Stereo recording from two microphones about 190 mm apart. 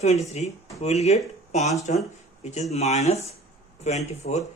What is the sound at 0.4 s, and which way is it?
Speech, 35° left (ahead or behind).